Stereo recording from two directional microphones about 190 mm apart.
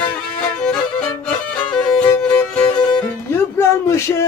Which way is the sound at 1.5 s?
5° left (ahead or behind).